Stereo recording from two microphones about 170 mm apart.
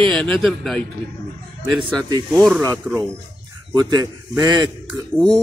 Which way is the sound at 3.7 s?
25° right (ahead or behind).